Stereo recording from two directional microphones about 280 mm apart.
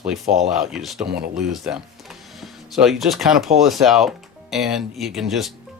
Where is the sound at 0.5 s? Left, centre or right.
Centre.